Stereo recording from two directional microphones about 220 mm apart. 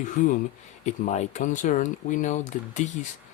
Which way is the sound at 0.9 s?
30° left (ahead or behind).